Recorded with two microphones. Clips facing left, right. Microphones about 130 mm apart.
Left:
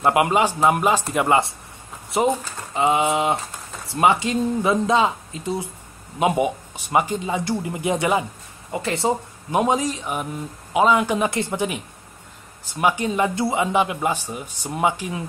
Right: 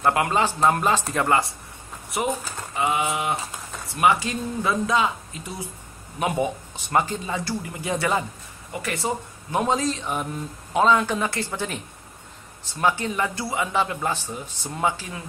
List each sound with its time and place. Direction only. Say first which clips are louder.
0.0 s a man's voice: left 3 dB; 20° left (ahead or behind)
2.1 s a man's voice: left 6 dB; 25° left (ahead or behind)